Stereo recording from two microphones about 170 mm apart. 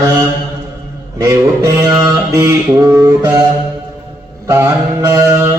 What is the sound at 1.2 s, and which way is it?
Mantra, 20° right (ahead or behind).